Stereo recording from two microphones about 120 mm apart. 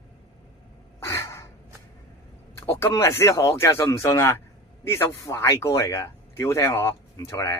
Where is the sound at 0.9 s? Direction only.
25° left (ahead or behind).